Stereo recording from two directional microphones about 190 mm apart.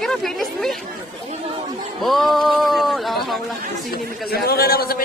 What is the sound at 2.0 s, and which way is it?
Speech, centre (ahead or behind).